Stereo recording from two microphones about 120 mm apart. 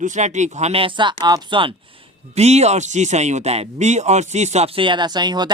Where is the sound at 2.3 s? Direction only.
65° right (ahead or behind).